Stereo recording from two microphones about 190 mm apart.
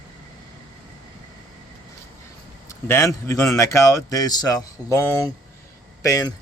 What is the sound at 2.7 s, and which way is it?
Speech, 15° left (ahead or behind).